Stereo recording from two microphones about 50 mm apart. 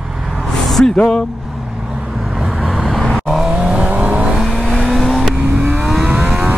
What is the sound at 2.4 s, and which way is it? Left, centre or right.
Vehicle, centre.